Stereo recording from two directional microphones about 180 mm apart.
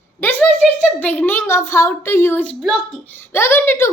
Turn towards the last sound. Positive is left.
turn(degrees=15)  # may be behind; listen again after turning